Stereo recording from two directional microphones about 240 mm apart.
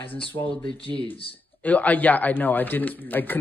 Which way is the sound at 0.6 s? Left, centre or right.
Left.